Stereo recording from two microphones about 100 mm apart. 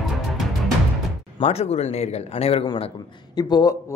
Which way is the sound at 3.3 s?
45° left (ahead or behind).